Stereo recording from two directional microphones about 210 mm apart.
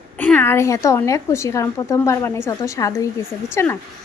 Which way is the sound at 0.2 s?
10° left (ahead or behind).